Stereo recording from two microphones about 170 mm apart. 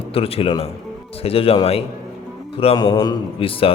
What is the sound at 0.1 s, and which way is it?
A man's voice, 35° left (ahead or behind).